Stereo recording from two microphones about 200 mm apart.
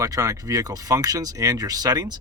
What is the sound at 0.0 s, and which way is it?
Speech, 15° right (ahead or behind).